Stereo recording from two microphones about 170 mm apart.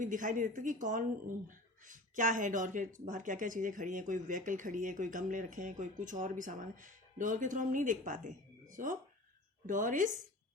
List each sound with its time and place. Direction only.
0.0 s speech: 50° right (ahead or behind)